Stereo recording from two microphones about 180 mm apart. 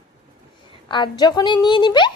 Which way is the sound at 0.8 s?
25° left (ahead or behind).